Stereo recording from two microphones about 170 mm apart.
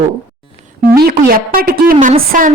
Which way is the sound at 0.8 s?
65° right (ahead or behind).